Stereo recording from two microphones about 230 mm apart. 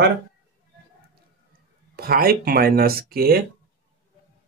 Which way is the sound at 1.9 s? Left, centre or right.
Right.